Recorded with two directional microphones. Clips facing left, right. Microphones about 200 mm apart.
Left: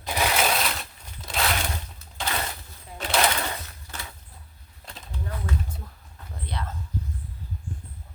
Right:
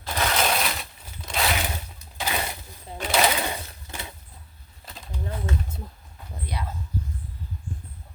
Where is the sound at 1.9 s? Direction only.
15° right (ahead or behind).